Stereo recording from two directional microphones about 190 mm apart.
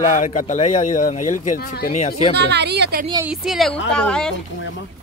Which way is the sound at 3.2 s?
5° right (ahead or behind).